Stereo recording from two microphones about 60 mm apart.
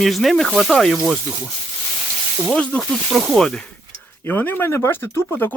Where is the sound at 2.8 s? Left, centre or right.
Centre.